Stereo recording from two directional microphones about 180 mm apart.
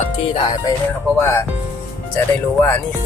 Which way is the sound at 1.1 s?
15° left (ahead or behind).